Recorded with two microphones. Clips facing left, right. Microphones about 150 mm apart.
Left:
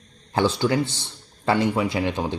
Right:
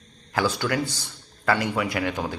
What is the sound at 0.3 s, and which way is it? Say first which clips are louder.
Speech: left 4 dB; 25° left (ahead or behind).